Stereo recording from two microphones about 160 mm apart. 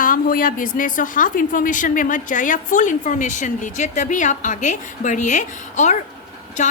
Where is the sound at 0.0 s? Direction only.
60° left (ahead or behind).